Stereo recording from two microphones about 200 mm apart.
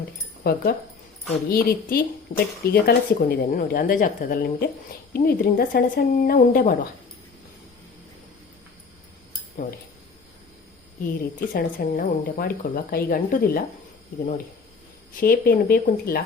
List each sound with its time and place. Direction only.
0.4 s speech: 50° left (ahead or behind)
2.3 s speech: 30° left (ahead or behind)
2.7 s speech: 50° left (ahead or behind)
11.0 s speech: 50° left (ahead or behind)
15.1 s speech: 45° left (ahead or behind)